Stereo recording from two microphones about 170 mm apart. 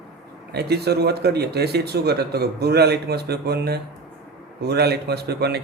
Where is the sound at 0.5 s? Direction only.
70° right (ahead or behind).